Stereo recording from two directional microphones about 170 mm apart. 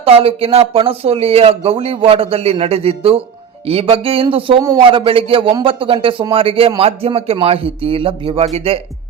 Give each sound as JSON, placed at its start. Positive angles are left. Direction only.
{"t": 0.0, "sound": "a man's voice", "side_deg": -35}